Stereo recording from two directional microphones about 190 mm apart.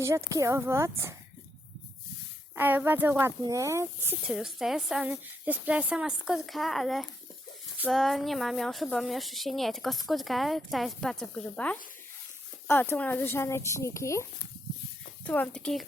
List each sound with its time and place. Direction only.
0.0 s speech: 15° right (ahead or behind)
2.6 s speech: 10° right (ahead or behind); by 15.8 s 5° left (ahead or behind)